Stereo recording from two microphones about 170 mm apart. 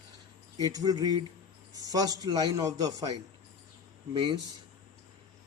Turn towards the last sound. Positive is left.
turn(degrees=-30)  # may be behind; listen again after turning